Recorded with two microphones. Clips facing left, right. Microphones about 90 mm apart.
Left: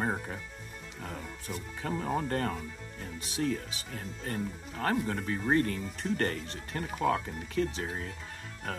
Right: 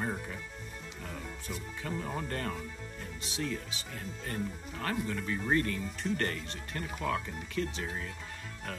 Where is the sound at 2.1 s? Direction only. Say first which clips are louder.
Left 5 dB; 35° left (ahead or behind).